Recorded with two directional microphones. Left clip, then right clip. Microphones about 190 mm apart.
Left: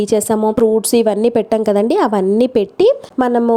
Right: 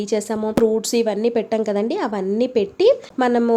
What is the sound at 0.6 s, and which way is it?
A woman's voice, 30° left (ahead or behind).